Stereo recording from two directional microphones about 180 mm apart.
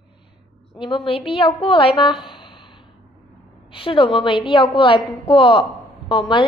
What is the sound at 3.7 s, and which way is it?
A woman's voice, 30° left (ahead or behind).